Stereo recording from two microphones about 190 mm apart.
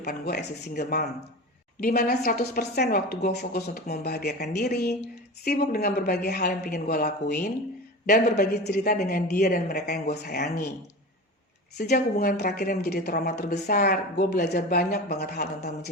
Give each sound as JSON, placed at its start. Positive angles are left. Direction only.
{"t": 0.0, "sound": "a woman's voice", "side_deg": 55}
{"t": 2.8, "sound": "a woman's voice", "side_deg": 45}
{"t": 11.8, "sound": "a woman's voice", "side_deg": 55}